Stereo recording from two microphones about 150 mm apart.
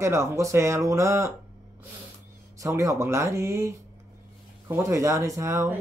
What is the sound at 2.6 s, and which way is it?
Speech, 20° right (ahead or behind).